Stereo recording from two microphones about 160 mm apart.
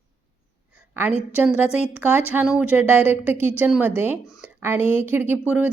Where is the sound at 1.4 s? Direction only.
10° right (ahead or behind).